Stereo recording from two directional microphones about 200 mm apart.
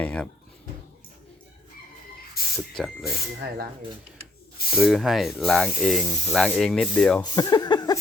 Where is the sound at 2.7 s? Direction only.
Centre (ahead or behind).